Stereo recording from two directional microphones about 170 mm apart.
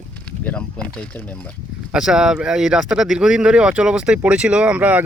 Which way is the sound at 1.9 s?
5° right (ahead or behind).